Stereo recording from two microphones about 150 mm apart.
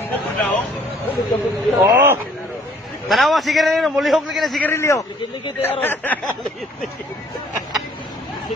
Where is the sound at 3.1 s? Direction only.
Centre (ahead or behind).